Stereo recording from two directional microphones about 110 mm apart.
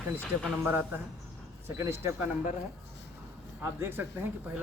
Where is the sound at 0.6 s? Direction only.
20° right (ahead or behind).